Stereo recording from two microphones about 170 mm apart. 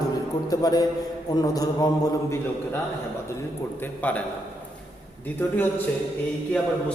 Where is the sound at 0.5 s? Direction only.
20° left (ahead or behind).